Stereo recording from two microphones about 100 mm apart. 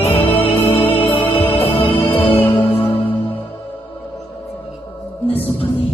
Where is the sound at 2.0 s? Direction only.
65° left (ahead or behind).